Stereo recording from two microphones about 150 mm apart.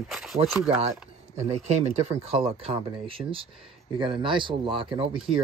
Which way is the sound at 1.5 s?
45° right (ahead or behind).